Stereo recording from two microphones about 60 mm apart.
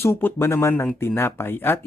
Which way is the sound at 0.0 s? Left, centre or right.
Left.